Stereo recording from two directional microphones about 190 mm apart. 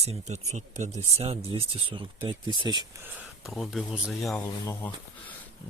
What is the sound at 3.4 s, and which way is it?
Speech, centre (ahead or behind).